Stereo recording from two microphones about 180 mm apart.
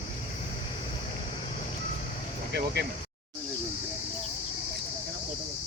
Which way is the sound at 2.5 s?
65° right (ahead or behind).